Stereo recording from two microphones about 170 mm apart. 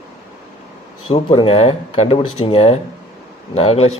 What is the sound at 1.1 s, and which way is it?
A man's voice, 30° left (ahead or behind).